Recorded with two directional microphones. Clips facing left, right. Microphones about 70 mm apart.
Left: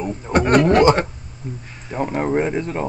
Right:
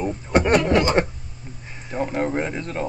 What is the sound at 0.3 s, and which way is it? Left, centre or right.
Speech, left.